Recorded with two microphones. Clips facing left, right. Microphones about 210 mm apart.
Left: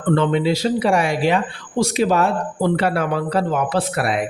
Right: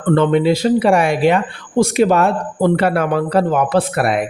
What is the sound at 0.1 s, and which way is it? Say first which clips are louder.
Speech: right 4 dB; 55° right (ahead or behind).